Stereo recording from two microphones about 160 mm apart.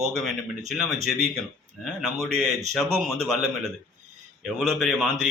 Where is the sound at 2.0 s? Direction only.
Centre (ahead or behind).